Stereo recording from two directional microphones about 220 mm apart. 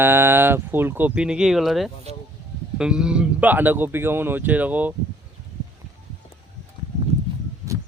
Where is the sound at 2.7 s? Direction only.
5° right (ahead or behind).